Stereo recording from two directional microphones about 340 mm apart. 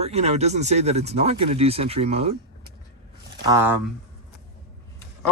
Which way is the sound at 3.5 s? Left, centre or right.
Centre.